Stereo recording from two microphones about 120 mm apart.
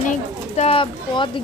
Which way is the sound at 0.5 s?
55° left (ahead or behind).